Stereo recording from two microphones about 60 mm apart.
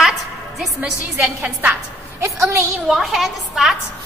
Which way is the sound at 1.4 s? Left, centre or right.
Right.